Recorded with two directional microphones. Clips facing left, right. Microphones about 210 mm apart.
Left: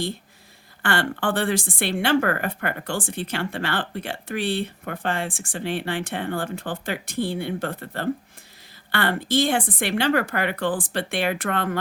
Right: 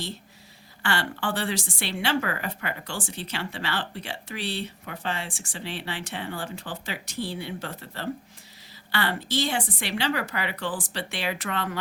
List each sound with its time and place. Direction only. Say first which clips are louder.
0.8 s a woman's voice: left 4 dB; 55° left (ahead or behind)